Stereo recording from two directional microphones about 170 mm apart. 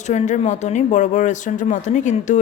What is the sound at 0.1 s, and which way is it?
A woman's voice, 45° left (ahead or behind).